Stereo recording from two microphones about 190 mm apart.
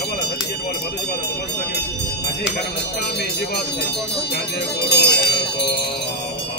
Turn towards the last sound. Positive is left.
turn(degrees=60)  # may be behind; listen again after turning